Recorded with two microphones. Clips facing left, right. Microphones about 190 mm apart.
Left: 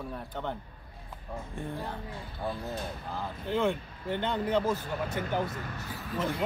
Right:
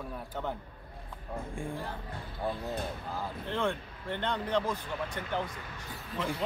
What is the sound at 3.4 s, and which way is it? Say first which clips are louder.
A man's voice: left 5 dB; 5° left (ahead or behind).